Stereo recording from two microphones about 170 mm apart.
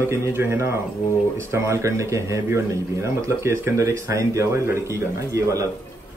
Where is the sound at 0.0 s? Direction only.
15° right (ahead or behind).